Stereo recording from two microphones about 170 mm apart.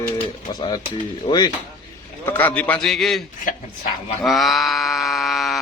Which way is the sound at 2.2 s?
10° left (ahead or behind).